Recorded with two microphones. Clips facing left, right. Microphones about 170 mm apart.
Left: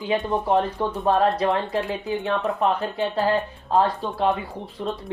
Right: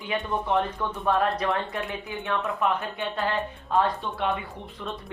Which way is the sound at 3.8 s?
35° left (ahead or behind).